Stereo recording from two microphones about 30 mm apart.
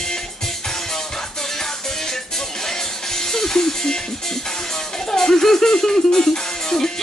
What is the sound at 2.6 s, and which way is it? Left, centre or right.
Music, centre.